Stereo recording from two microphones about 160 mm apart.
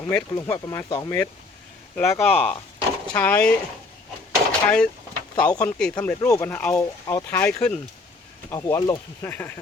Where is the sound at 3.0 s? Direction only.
10° left (ahead or behind).